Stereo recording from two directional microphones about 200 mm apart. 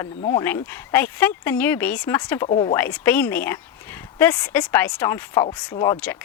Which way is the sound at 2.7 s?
10° left (ahead or behind).